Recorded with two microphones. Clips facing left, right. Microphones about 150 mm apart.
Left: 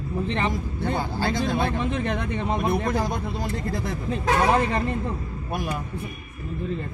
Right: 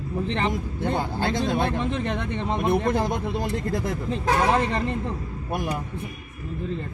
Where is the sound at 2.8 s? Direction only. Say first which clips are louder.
Right 2 dB; 25° right (ahead or behind).